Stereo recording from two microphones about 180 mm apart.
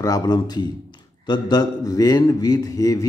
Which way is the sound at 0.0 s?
20° left (ahead or behind).